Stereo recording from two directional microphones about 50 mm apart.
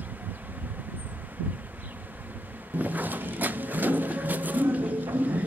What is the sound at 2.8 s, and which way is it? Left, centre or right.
Vehicle, right.